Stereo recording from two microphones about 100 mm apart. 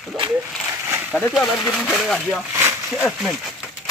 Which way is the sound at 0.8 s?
25° right (ahead or behind).